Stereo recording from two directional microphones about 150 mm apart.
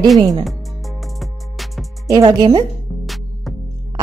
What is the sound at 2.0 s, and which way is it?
Speech, 25° right (ahead or behind).